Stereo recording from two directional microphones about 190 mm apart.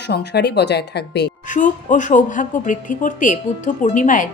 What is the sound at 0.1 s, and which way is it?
Speech, 60° left (ahead or behind).